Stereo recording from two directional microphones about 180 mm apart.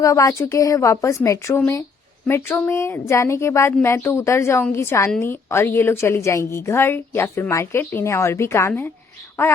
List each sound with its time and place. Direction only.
0.0 s a woman's voice: 15° left (ahead or behind)